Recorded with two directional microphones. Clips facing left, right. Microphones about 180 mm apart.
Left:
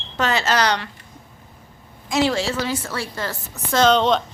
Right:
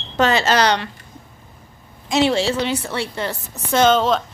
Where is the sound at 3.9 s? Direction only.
5° right (ahead or behind).